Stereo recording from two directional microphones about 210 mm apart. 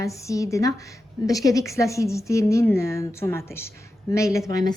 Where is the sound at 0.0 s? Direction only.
15° left (ahead or behind).